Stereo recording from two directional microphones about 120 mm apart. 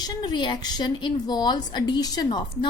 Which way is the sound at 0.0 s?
35° left (ahead or behind).